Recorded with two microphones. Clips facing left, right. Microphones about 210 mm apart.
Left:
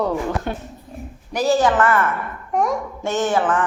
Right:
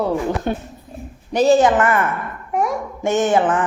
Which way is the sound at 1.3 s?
20° right (ahead or behind).